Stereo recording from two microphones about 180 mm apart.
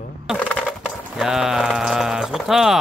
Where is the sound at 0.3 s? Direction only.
5° left (ahead or behind).